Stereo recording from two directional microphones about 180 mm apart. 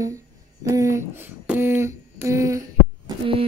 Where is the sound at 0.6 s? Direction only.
15° right (ahead or behind).